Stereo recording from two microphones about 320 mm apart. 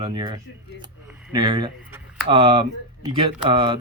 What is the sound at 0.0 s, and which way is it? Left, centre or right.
Speech, centre.